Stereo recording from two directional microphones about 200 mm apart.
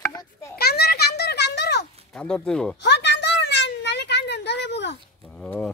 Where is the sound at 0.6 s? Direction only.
50° left (ahead or behind).